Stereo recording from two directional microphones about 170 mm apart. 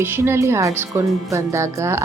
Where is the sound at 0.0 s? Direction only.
15° right (ahead or behind).